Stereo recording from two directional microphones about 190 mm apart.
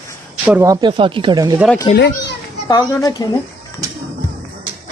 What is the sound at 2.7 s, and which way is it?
Speech, 20° left (ahead or behind).